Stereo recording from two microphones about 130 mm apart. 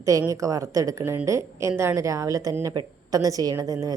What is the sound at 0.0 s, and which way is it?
A woman's voice, 25° right (ahead or behind).